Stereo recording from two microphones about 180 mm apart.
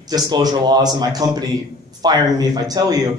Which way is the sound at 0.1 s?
20° right (ahead or behind).